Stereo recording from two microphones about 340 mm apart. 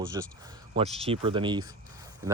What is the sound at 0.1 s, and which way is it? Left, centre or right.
Speech, centre.